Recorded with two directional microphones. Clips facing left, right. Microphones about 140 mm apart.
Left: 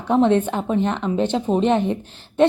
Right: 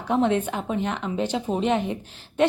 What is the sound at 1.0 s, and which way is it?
Speech, 25° left (ahead or behind).